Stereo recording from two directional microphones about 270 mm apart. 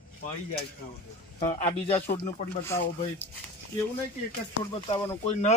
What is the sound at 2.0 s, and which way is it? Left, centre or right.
Speech, left.